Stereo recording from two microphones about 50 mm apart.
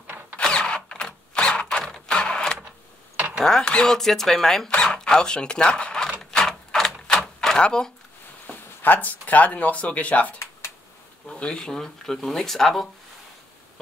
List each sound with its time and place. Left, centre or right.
0.4 s typewriter: centre
2.0 s a sound: centre
3.3 s speech: centre
6.3 s a sound: centre
8.5 s speech: left
11.3 s speech: centre